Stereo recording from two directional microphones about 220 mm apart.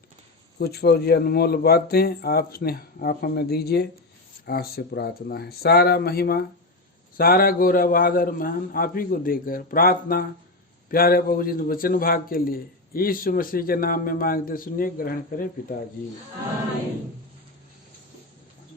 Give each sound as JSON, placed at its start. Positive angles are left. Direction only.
{"t": 0.6, "sound": "a man's voice", "side_deg": 45}